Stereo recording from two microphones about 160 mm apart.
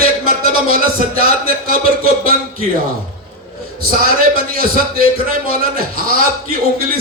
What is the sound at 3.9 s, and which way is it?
Speech, 60° right (ahead or behind).